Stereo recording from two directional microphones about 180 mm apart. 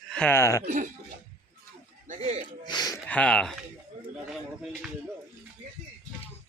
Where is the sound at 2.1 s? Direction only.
40° right (ahead or behind).